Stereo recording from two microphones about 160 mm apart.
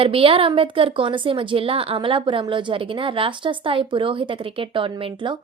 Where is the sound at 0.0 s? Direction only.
35° right (ahead or behind).